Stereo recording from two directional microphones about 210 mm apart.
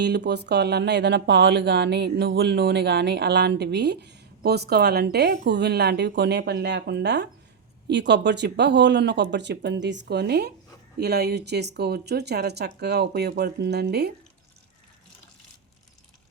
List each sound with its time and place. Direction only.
0.0 s speech: 50° right (ahead or behind)